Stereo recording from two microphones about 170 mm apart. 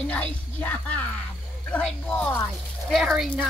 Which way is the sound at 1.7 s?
5° left (ahead or behind).